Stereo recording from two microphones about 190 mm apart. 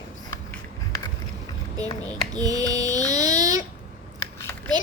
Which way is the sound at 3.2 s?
40° left (ahead or behind).